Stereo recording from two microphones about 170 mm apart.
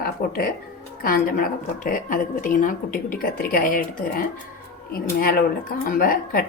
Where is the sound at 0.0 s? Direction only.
60° left (ahead or behind).